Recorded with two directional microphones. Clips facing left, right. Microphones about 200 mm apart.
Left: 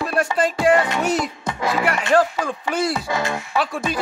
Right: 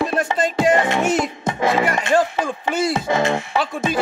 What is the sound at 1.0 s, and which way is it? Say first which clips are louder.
Music: right 2 dB; 50° right (ahead or behind).